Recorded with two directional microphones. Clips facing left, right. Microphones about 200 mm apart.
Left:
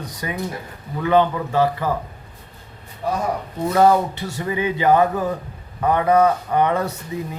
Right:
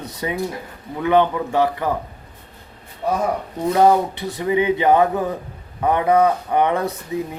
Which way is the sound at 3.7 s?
15° right (ahead or behind).